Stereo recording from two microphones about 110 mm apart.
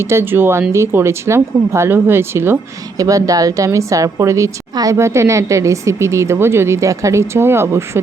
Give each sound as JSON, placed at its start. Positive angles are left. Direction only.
{"t": 0.0, "sound": "a woman's voice", "side_deg": -25}
{"t": 3.0, "sound": "a woman's voice", "side_deg": -30}